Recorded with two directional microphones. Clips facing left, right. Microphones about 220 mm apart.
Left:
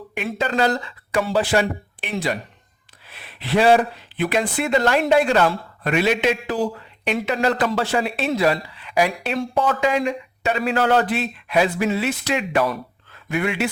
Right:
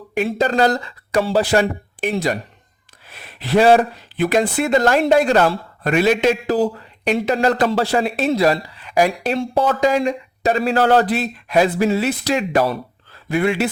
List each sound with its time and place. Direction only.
0.1 s speech: 35° right (ahead or behind)